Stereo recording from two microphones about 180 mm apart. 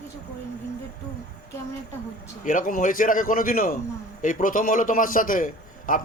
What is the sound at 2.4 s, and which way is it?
Speech, 45° left (ahead or behind).